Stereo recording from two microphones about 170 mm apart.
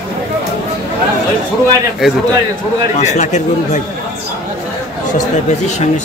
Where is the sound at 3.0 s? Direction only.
45° left (ahead or behind).